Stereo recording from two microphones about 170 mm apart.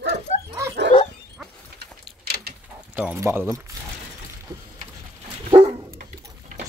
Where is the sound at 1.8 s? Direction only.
65° right (ahead or behind).